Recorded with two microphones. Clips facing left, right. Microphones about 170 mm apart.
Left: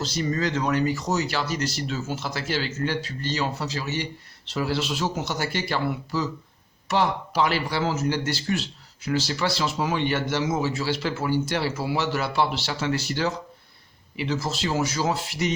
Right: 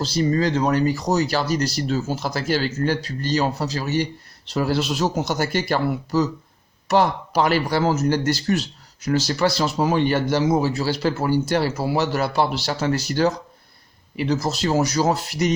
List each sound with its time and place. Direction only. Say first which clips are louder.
0.0 s speech: right 6 dB; 30° right (ahead or behind)